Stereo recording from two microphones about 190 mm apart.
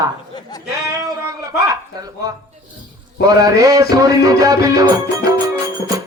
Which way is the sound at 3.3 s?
20° right (ahead or behind).